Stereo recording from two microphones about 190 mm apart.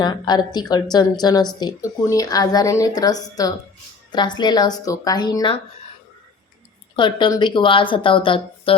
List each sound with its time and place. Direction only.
0.0 s a woman's voice: 20° left (ahead or behind)
6.9 s a woman's voice: 25° left (ahead or behind)